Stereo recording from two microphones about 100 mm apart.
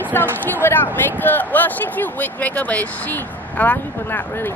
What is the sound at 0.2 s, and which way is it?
A woman's voice, 25° left (ahead or behind).